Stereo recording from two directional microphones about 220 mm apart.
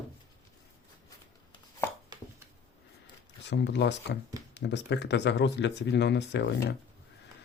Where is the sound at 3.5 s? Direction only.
50° left (ahead or behind).